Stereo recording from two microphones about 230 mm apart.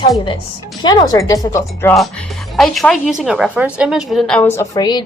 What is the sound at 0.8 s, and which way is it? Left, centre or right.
Speech, centre.